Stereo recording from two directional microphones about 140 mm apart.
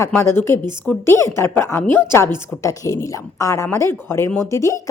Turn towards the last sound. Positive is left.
turn(degrees=20)  # may be behind; listen again after turning